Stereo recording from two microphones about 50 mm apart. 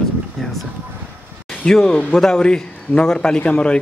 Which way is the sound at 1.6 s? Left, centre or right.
Centre.